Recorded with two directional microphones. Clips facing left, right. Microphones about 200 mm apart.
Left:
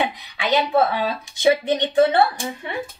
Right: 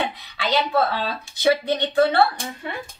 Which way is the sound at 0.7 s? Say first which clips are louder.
Left 3 dB; 20° left (ahead or behind).